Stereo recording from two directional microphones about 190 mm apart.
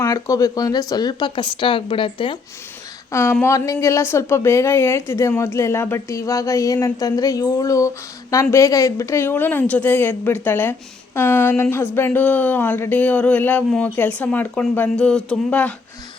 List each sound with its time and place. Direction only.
0.0 s speech: 15° left (ahead or behind)
3.1 s speech: 15° left (ahead or behind)